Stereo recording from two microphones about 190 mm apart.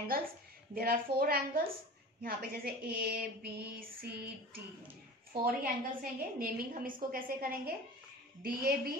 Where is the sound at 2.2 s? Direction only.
55° right (ahead or behind).